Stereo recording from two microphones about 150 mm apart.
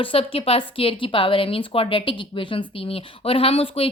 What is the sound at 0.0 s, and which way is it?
Speech, 40° left (ahead or behind).